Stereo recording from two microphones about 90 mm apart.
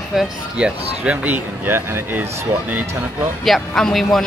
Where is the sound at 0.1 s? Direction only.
5° right (ahead or behind); by 2.2 s 25° right (ahead or behind).